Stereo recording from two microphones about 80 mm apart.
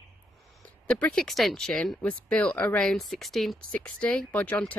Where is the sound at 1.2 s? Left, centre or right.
Centre.